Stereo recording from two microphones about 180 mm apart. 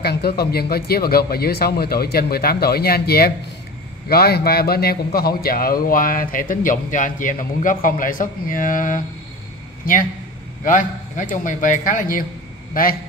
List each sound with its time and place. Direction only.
0.0 s a man's voice: 60° left (ahead or behind)
10.6 s a man's voice: 45° left (ahead or behind)